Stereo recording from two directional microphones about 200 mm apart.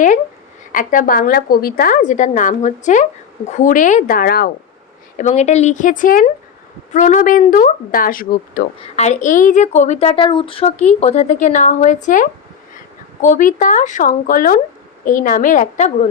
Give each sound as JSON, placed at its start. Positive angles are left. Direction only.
{"t": 0.7, "sound": "a woman's voice", "side_deg": 40}
{"t": 5.1, "sound": "a woman's voice", "side_deg": 35}